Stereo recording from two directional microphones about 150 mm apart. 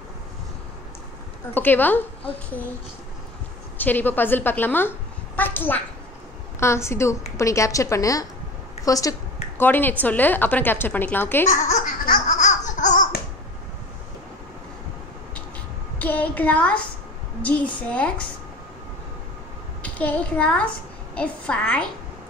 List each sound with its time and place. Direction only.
1.5 s a woman's voice: 10° left (ahead or behind)
3.7 s a woman's voice: 10° left (ahead or behind)
11.4 s baby laughter: 55° left (ahead or behind)
16.0 s a woman's voice: 10° left (ahead or behind)
19.8 s a child's voice: 10° left (ahead or behind)